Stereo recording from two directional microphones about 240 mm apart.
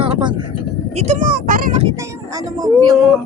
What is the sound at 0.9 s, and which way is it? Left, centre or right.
Speech, right.